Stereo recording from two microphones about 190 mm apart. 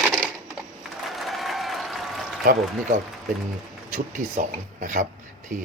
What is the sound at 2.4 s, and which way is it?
Speech, 50° right (ahead or behind).